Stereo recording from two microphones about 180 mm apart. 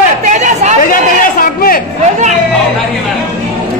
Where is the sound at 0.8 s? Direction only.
50° left (ahead or behind).